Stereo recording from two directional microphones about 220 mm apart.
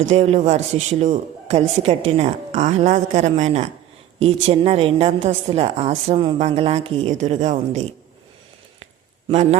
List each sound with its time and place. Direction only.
0.1 s a woman's voice: 30° right (ahead or behind)
9.3 s a woman's voice: 30° right (ahead or behind)